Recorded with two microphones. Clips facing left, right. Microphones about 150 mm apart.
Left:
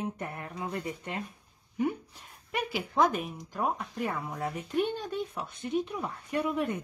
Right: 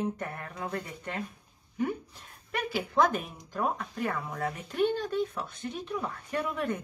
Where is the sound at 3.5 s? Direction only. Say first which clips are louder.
Right 1 dB; 15° left (ahead or behind).